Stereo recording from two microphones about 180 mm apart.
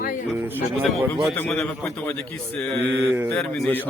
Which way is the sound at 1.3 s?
5° left (ahead or behind).